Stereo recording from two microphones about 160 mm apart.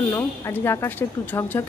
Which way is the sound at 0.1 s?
15° left (ahead or behind).